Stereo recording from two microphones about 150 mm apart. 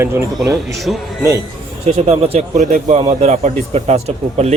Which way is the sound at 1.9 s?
45° right (ahead or behind).